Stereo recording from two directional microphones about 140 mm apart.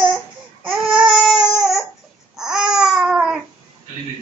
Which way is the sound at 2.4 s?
5° right (ahead or behind).